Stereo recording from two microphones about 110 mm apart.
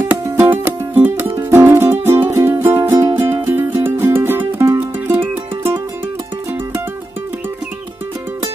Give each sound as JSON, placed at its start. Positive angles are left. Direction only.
{"t": 0.1, "sound": "music", "side_deg": -15}